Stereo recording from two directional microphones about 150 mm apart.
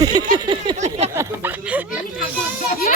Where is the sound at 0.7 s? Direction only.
50° right (ahead or behind).